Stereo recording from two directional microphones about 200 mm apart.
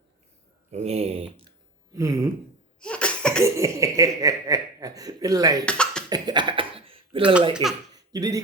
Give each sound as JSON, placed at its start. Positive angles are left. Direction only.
{"t": 0.7, "sound": "speech", "side_deg": -30}
{"t": 2.0, "sound": "speech", "side_deg": -15}
{"t": 2.8, "sound": "cough", "side_deg": 5}
{"t": 3.4, "sound": "speech", "side_deg": -15}
{"t": 5.6, "sound": "cough", "side_deg": 5}
{"t": 6.1, "sound": "a sound", "side_deg": -20}
{"t": 7.5, "sound": "speech", "side_deg": 0}
{"t": 7.9, "sound": "laughter", "side_deg": -20}